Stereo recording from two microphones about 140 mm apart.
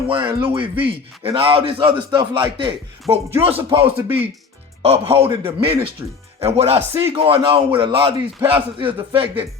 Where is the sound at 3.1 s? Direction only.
20° right (ahead or behind).